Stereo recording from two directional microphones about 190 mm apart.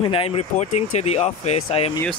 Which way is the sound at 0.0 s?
30° left (ahead or behind).